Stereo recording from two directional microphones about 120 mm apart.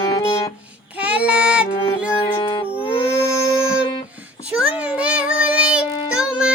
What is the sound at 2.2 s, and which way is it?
Music, 45° left (ahead or behind).